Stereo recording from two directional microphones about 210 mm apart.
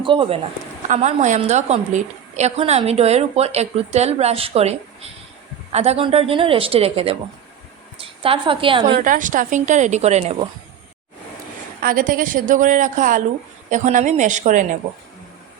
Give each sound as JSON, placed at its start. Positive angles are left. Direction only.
{"t": 0.0, "sound": "a woman's voice", "side_deg": -25}
{"t": 0.9, "sound": "a woman's voice", "side_deg": -35}
{"t": 9.0, "sound": "a woman's voice", "side_deg": -40}
{"t": 11.8, "sound": "a woman's voice", "side_deg": -40}